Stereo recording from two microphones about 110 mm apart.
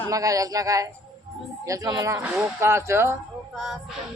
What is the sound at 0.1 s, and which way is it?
A man's voice, 30° right (ahead or behind).